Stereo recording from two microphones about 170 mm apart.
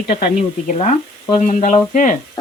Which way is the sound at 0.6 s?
45° left (ahead or behind).